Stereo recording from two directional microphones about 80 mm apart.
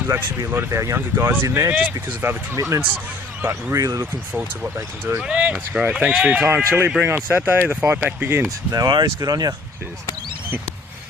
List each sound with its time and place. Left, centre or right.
0.1 s speech: right
0.9 s speech: right
2.6 s speech: right
3.4 s speech: right
3.8 s speech: right
4.0 s speech: right
6.5 s speech: right
8.4 s speech: right
8.9 s speech: right